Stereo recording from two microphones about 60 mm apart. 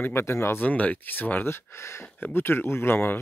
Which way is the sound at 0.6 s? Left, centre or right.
Left.